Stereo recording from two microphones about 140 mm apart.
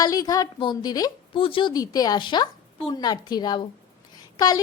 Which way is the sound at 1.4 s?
40° left (ahead or behind).